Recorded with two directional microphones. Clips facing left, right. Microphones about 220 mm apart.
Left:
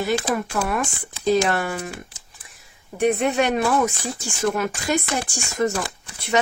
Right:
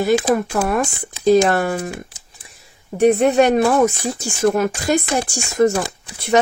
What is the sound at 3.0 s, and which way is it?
Speech, 35° right (ahead or behind).